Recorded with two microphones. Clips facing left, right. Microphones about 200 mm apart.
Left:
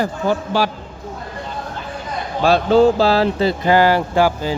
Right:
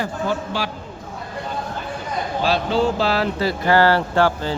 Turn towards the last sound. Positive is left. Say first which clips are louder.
# left 2 dB
turn(degrees=10)  # may be behind; listen again after turning